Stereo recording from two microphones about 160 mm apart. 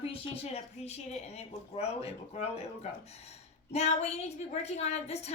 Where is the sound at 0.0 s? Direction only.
40° left (ahead or behind).